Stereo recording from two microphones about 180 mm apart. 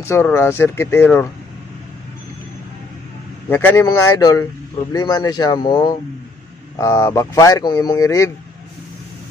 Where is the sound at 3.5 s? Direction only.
10° left (ahead or behind).